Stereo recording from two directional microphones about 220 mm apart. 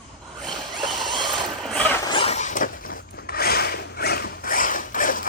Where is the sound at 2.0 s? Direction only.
25° left (ahead or behind).